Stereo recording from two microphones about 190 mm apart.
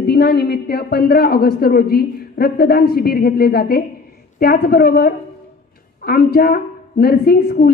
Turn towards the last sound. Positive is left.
turn(degrees=55)  # may be behind; listen again after turning